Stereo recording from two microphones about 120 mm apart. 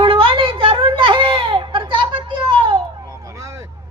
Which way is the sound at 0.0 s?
45° right (ahead or behind).